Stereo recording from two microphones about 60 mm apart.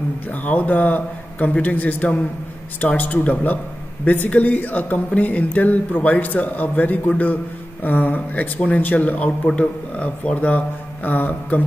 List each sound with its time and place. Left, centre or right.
0.3 s speech: left